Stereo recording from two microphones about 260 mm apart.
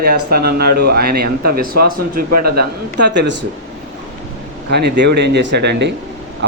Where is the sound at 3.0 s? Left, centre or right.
Right.